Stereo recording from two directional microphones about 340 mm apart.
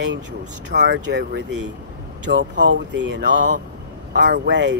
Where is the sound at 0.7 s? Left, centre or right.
Right.